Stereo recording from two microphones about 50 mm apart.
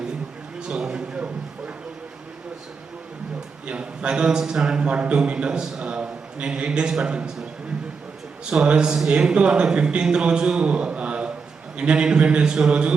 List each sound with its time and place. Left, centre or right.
0.6 s a sound: centre
3.7 s a man's voice: right
8.4 s a man's voice: centre